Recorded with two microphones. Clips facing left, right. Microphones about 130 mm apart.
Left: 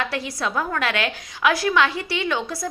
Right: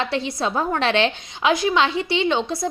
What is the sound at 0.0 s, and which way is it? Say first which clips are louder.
A woman's voice: right 3 dB; 25° right (ahead or behind).